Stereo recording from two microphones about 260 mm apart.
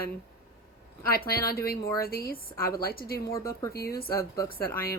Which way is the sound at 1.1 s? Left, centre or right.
Left.